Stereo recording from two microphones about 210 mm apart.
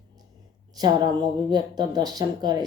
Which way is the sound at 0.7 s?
20° right (ahead or behind).